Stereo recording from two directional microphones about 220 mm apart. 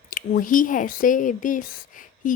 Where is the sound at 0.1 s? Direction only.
35° left (ahead or behind).